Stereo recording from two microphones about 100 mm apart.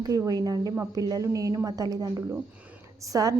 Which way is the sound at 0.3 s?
40° right (ahead or behind).